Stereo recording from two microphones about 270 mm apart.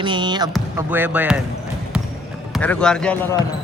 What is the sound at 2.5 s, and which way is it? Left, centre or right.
Speech, centre.